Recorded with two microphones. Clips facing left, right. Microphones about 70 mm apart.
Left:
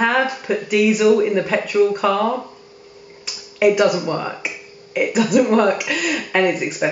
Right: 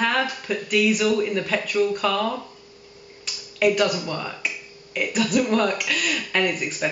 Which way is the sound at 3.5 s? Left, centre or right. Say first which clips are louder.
Left 5 dB; centre.